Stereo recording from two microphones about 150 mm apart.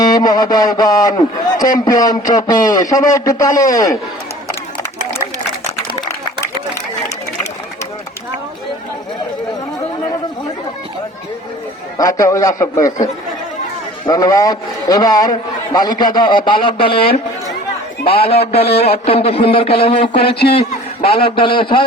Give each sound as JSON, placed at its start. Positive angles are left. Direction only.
{"t": 0.0, "sound": "a man's voice", "side_deg": 25}
{"t": 11.9, "sound": "a man's voice", "side_deg": 25}
{"t": 14.1, "sound": "a man's voice", "side_deg": 25}